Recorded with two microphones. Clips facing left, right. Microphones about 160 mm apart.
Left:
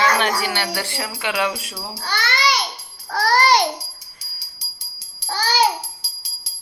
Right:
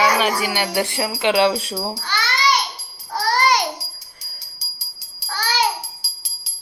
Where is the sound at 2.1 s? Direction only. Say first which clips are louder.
Even; 50° left (ahead or behind).